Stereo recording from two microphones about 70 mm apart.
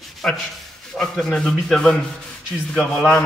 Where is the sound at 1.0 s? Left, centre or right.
Centre.